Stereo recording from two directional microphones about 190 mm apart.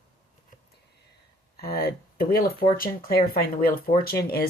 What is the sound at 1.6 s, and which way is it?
Speech, 55° left (ahead or behind).